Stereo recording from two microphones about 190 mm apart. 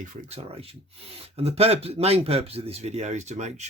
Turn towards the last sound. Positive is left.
turn(degrees=-35)  # may be behind; listen again after turning